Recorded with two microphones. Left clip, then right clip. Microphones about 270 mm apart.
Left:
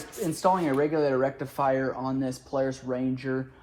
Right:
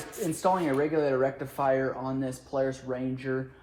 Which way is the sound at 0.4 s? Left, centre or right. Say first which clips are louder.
Left 2 dB; centre.